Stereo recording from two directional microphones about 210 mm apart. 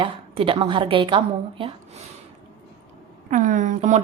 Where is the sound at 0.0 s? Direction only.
25° right (ahead or behind).